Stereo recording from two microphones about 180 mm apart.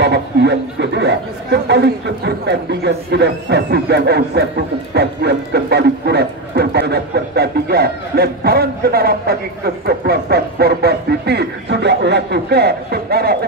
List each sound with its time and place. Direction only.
0.0 s speech: 65° right (ahead or behind)